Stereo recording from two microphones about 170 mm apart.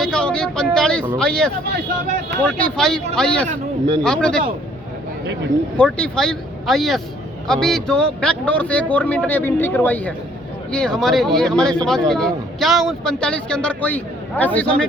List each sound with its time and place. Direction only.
0.0 s a sound: 5° left (ahead or behind)
1.2 s speech: 5° left (ahead or behind)
5.7 s a man's voice: 5° left (ahead or behind)